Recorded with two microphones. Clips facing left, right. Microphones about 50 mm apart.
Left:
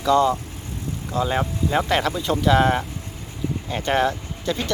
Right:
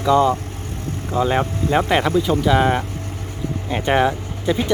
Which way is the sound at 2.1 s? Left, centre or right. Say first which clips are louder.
Right 3 dB; centre.